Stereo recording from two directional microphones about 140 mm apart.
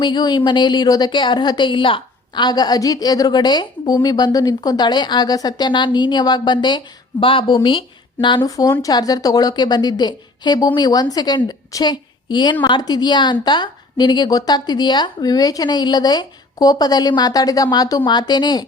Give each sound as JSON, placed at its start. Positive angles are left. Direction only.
{"t": 0.0, "sound": "a woman's voice", "side_deg": 30}
{"t": 8.4, "sound": "a woman's voice", "side_deg": 25}